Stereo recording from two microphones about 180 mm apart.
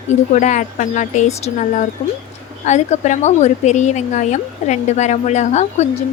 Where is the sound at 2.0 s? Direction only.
30° left (ahead or behind).